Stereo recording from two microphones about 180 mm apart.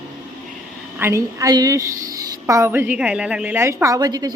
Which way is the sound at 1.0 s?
15° right (ahead or behind).